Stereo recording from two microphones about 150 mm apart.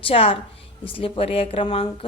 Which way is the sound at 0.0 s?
40° left (ahead or behind).